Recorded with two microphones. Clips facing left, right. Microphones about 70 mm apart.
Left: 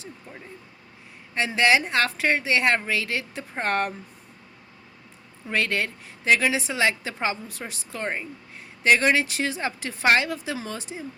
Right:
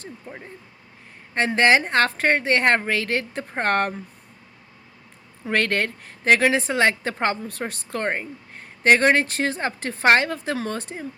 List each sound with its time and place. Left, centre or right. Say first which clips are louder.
0.3 s speech: right 4 dB; right
1.3 s a woman's voice: right 3 dB; right
5.5 s a woman's voice: right 3 dB; right